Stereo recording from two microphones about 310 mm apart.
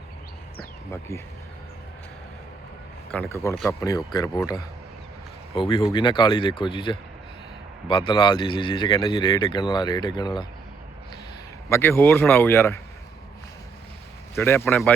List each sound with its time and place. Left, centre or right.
3.3 s speech: centre
11.7 s speech: centre
14.3 s speech: centre